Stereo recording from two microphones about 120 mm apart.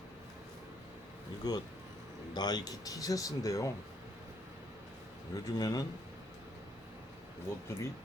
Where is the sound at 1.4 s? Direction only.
35° left (ahead or behind).